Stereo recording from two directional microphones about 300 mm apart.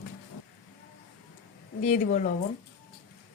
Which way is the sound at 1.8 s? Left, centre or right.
Left.